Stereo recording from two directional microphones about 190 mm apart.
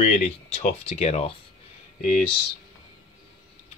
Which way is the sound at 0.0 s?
35° left (ahead or behind).